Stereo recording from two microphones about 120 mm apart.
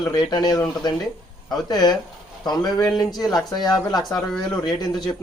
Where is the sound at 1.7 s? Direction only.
35° left (ahead or behind).